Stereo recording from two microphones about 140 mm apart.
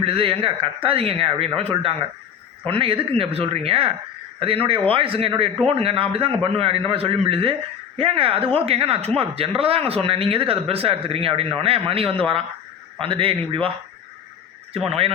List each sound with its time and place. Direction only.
0.0 s speech: 40° right (ahead or behind)
14.7 s speech: 45° right (ahead or behind)